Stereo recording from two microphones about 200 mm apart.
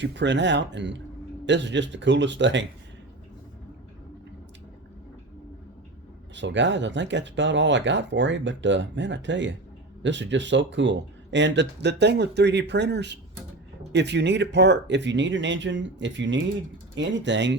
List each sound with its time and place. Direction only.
0.0 s speech: 60° right (ahead or behind)
6.3 s speech: 65° right (ahead or behind)